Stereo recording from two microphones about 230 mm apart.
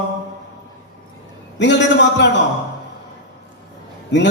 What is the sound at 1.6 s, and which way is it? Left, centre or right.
Speech, left.